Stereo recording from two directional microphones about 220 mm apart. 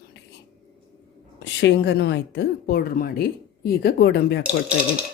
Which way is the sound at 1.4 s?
55° left (ahead or behind).